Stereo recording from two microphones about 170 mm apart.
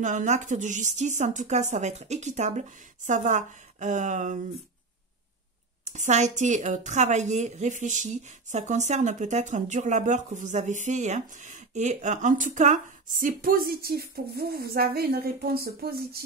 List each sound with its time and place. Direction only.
0.0 s a woman's voice: 45° right (ahead or behind)
5.9 s a woman's voice: 45° right (ahead or behind); by 16.2 s 65° right (ahead or behind)